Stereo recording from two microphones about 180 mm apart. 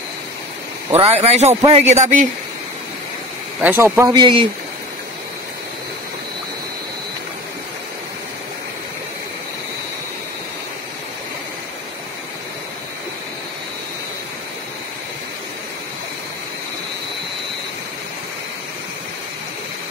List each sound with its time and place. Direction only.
0.9 s speech: 35° right (ahead or behind)
3.6 s speech: 10° right (ahead or behind)